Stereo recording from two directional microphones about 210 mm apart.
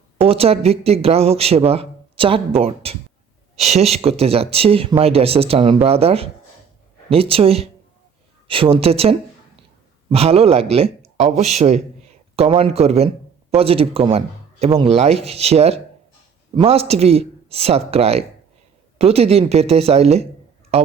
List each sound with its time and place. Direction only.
0.3 s speech: 30° right (ahead or behind)